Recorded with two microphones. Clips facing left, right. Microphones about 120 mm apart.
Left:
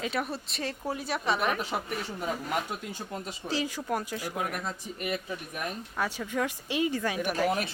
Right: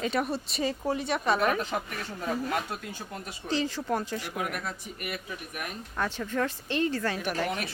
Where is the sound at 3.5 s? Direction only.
10° left (ahead or behind).